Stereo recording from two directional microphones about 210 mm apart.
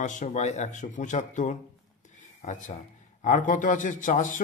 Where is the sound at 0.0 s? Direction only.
35° left (ahead or behind).